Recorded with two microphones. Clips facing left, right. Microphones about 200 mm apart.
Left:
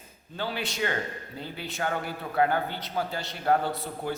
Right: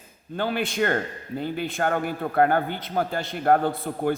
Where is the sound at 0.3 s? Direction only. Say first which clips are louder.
Right 7 dB; 50° right (ahead or behind).